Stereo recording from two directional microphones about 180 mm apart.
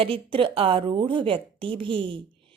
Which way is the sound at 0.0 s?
30° right (ahead or behind).